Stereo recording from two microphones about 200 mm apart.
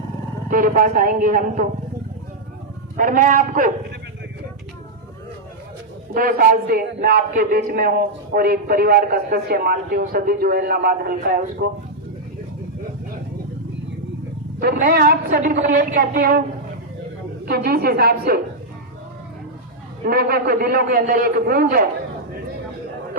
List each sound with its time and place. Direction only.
0.5 s a man's voice: 45° right (ahead or behind)
3.0 s a man's voice: 40° right (ahead or behind)
6.1 s a man's voice: 45° right (ahead or behind)
14.6 s a man's voice: 50° right (ahead or behind)
17.5 s a man's voice: 50° right (ahead or behind)
20.1 s a man's voice: 50° right (ahead or behind)